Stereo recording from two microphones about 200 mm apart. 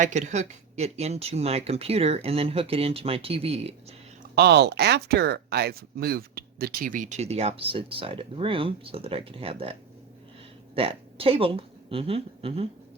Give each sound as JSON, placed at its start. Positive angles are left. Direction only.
{"t": 0.0, "sound": "speech", "side_deg": -35}
{"t": 4.2, "sound": "speech", "side_deg": -55}
{"t": 10.8, "sound": "a woman's voice", "side_deg": -30}